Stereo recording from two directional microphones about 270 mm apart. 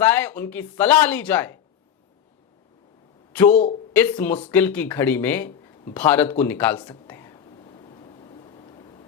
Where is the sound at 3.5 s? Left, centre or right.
Left.